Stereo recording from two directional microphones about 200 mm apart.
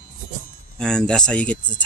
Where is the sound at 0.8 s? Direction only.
5° left (ahead or behind).